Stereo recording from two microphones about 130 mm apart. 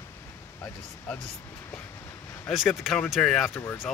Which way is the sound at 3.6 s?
15° left (ahead or behind).